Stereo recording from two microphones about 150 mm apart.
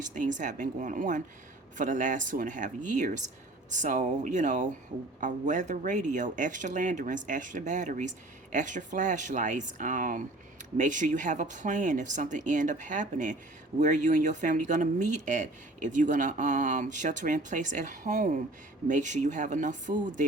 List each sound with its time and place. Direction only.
0.0 s speech: 55° right (ahead or behind)